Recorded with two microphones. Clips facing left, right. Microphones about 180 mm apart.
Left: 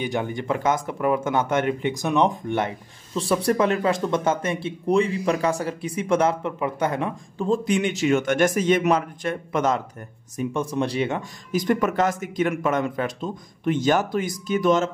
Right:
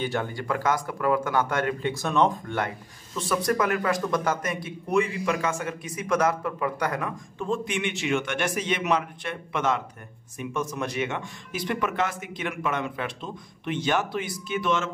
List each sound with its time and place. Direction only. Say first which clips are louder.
0.0 s speech: left 3 dB; 15° left (ahead or behind)
3.2 s a man's voice: left 4 dB; 30° left (ahead or behind)